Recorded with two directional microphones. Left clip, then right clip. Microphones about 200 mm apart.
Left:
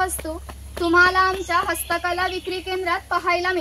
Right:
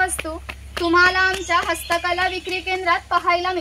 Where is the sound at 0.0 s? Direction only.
5° left (ahead or behind).